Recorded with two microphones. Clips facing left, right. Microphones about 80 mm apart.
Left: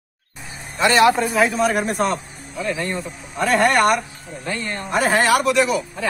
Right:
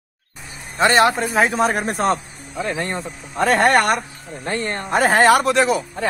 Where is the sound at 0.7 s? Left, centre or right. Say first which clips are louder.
Even; right.